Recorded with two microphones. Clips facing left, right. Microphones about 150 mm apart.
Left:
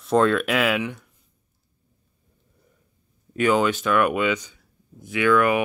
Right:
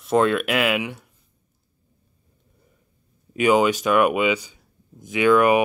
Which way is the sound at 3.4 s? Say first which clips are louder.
Right 2 dB; 15° right (ahead or behind).